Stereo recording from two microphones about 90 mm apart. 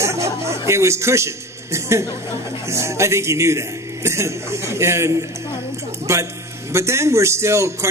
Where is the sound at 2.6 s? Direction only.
30° right (ahead or behind).